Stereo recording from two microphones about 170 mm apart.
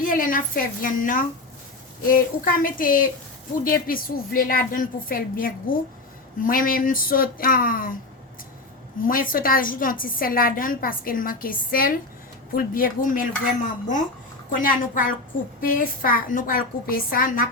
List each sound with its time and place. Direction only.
0.0 s a woman's voice: 55° left (ahead or behind)
9.0 s a woman's voice: 55° left (ahead or behind)
14.5 s a woman's voice: 55° left (ahead or behind)